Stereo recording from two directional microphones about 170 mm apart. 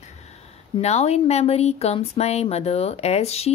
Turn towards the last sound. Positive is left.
turn(degrees=40)  # may be behind; listen again after turning